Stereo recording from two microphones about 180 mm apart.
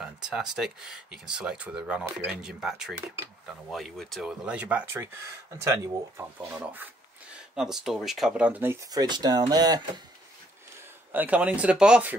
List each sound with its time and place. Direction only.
0.0 s speech: 5° right (ahead or behind)
8.9 s speech: 25° right (ahead or behind)
11.1 s speech: 10° right (ahead or behind)